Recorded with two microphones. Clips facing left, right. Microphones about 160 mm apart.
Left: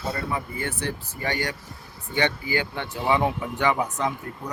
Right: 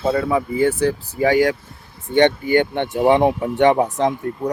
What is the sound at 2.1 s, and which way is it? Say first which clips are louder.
Speech: right 10 dB; 60° right (ahead or behind).